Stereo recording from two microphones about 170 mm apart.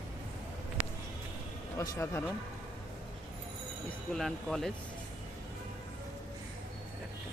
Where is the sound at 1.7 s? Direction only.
20° left (ahead or behind).